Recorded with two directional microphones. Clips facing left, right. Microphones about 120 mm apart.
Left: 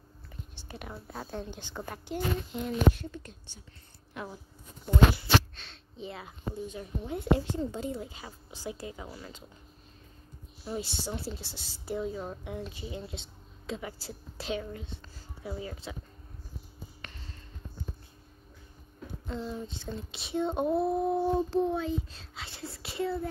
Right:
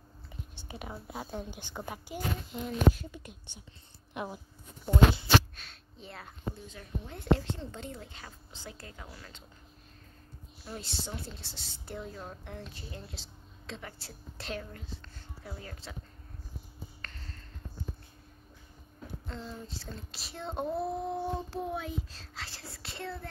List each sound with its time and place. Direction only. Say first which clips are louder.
0.6 s a woman's voice: even; 10° right (ahead or behind)
2.5 s speech: even; centre (ahead or behind)
3.1 s a woman's voice: left 3 dB; 10° right (ahead or behind)
5.5 s a sound: left 2 dB; 5° right (ahead or behind)
6.5 s a woman's voice: left 6 dB; 15° left (ahead or behind)
10.6 s a woman's voice: left 6 dB; 10° left (ahead or behind)
17.0 s a sound: left 2 dB; 5° left (ahead or behind)
19.2 s speech: left 7 dB; 5° left (ahead or behind)